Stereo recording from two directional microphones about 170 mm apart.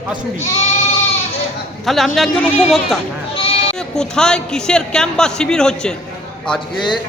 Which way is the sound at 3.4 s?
35° left (ahead or behind).